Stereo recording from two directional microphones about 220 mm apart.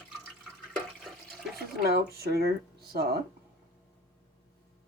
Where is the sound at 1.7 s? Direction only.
45° right (ahead or behind).